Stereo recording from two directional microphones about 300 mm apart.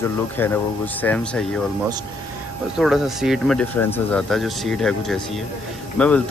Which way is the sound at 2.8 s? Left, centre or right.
Centre.